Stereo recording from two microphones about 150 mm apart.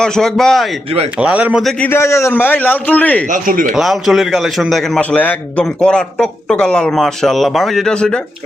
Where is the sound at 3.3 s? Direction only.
65° right (ahead or behind).